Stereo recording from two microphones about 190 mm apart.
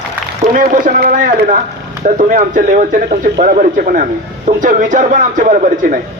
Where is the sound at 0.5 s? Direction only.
45° right (ahead or behind).